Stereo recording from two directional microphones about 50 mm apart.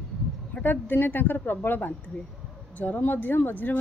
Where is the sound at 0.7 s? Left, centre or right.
Left.